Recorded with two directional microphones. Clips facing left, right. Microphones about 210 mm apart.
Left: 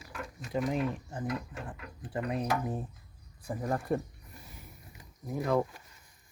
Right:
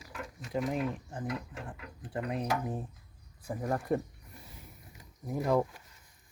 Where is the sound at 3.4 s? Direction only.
10° right (ahead or behind).